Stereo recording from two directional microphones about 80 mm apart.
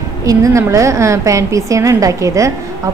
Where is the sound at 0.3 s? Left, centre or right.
Right.